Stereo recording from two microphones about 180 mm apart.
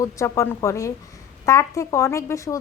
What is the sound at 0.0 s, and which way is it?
Speech, 15° left (ahead or behind).